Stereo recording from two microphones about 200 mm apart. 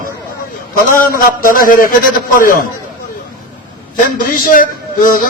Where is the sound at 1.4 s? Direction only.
45° left (ahead or behind).